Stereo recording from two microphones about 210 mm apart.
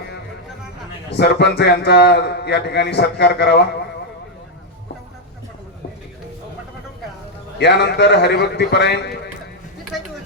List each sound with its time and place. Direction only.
1.1 s a man's voice: 55° left (ahead or behind)
7.6 s a man's voice: 55° left (ahead or behind)
9.9 s a sound: centre (ahead or behind)